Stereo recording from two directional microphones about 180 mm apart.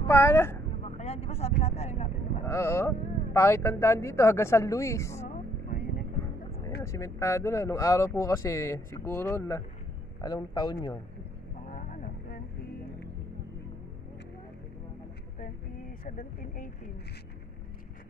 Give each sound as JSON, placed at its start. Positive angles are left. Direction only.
{"t": 0.1, "sound": "speech", "side_deg": 10}
{"t": 0.8, "sound": "vehicle", "side_deg": 35}
{"t": 2.4, "sound": "speech", "side_deg": 15}
{"t": 5.3, "sound": "vehicle", "side_deg": 55}
{"t": 6.8, "sound": "speech", "side_deg": 15}
{"t": 11.7, "sound": "vehicle", "side_deg": 50}
{"t": 16.0, "sound": "speech", "side_deg": 45}